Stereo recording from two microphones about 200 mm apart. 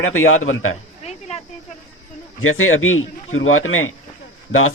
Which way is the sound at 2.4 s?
90° left.